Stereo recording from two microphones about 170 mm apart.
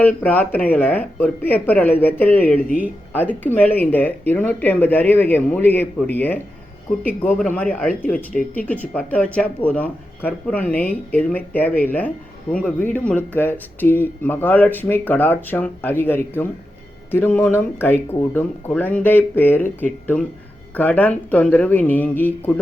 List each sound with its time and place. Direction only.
0.0 s speech: 10° left (ahead or behind)
8.3 s speech: 55° left (ahead or behind)
8.6 s speech: 10° left (ahead or behind)